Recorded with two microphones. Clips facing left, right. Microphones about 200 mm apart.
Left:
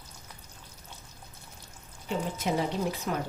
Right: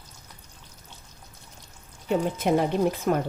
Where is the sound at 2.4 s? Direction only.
55° right (ahead or behind).